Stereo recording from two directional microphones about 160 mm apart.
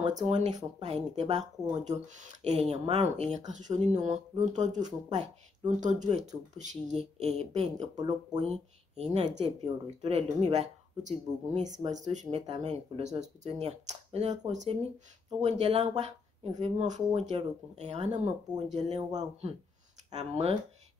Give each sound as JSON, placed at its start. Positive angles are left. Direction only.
{"t": 0.3, "sound": "speech", "side_deg": -45}